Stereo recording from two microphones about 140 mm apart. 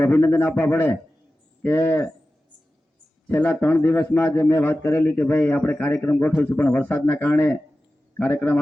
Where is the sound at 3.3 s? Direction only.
10° left (ahead or behind).